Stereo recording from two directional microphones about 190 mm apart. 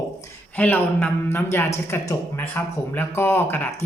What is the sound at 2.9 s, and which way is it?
Speech, 10° left (ahead or behind).